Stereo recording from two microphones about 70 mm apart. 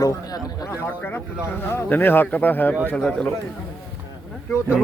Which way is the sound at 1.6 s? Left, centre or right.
Left.